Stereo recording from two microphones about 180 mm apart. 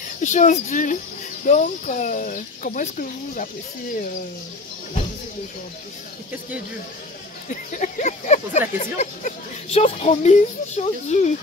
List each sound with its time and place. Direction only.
0.2 s speech: 40° left (ahead or behind)
7.4 s speech: 45° left (ahead or behind)